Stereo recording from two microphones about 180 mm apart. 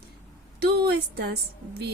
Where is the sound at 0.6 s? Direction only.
65° right (ahead or behind).